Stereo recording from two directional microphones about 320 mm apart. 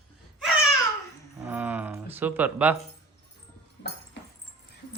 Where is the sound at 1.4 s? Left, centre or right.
Centre.